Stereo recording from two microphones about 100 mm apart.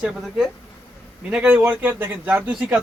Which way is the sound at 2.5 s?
5° right (ahead or behind).